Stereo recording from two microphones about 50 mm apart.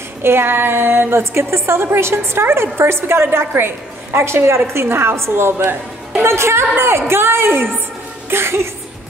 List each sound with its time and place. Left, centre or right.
0.2 s a woman's voice: right